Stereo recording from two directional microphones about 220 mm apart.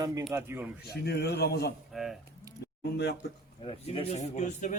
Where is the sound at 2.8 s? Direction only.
50° left (ahead or behind).